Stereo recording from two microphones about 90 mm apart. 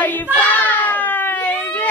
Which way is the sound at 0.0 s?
20° left (ahead or behind).